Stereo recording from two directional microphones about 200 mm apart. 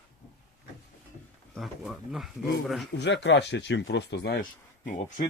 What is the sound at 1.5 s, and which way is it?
Speech, centre (ahead or behind).